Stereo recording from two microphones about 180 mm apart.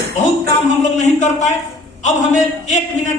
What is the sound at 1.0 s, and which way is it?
A man's voice, 40° left (ahead or behind).